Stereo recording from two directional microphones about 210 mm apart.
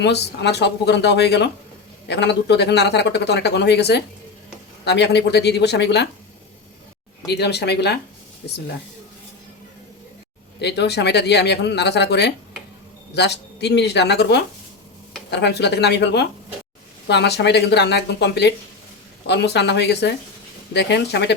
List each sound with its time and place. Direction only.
0.0 s speech: 55° left (ahead or behind)
7.3 s speech: 50° left (ahead or behind)
10.6 s speech: 55° left (ahead or behind)